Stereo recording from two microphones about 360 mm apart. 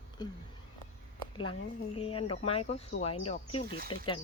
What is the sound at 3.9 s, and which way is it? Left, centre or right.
Speech, left.